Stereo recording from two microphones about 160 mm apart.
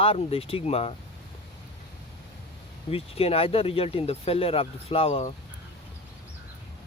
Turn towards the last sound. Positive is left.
turn(degrees=35)  # may be behind; listen again after turning